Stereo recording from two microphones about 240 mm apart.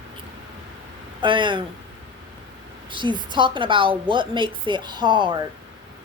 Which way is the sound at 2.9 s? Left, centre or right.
Centre.